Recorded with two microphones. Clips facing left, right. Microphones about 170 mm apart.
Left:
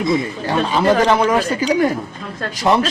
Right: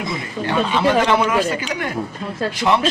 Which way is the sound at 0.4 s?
40° left (ahead or behind).